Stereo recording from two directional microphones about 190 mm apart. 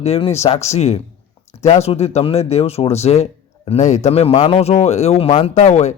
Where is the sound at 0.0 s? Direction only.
35° left (ahead or behind).